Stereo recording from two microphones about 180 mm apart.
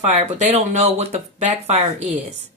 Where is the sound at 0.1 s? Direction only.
40° right (ahead or behind).